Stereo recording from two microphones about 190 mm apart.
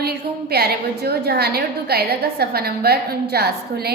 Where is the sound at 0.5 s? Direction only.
55° right (ahead or behind).